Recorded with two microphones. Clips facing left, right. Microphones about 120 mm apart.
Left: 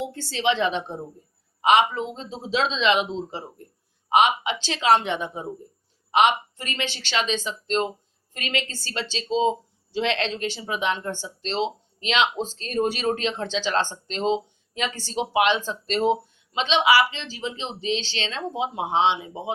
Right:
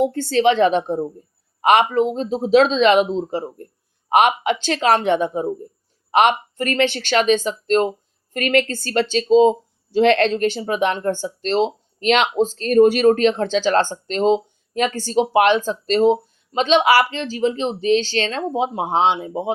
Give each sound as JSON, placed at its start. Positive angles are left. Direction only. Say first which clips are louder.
{"t": 0.0, "sound": "speech", "louder": "right 9 dB", "side_deg": -55}